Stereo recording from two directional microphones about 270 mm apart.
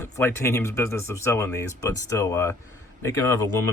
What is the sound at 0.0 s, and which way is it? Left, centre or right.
Speech, centre.